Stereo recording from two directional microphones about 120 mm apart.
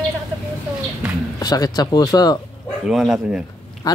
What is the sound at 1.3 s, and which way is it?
Chicken, 30° left (ahead or behind).